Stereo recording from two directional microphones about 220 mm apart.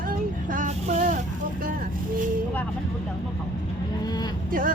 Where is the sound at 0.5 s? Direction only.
35° right (ahead or behind).